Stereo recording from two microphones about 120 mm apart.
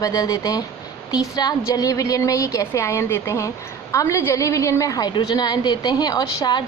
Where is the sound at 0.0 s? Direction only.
30° left (ahead or behind).